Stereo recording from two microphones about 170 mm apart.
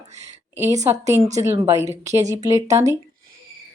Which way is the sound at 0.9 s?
15° right (ahead or behind).